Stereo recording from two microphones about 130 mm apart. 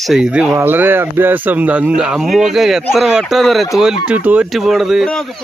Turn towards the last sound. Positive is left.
turn(degrees=0)  # may be behind; listen again after turning